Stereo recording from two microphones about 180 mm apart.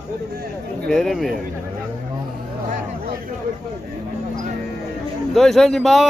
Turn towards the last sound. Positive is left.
turn(degrees=0)  # may be behind; listen again after turning